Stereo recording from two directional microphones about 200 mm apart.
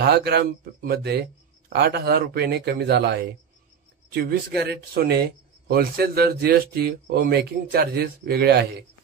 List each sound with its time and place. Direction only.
0.0 s speech: 55° right (ahead or behind)